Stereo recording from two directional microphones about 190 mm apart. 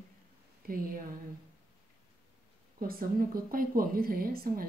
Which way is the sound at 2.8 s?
50° right (ahead or behind).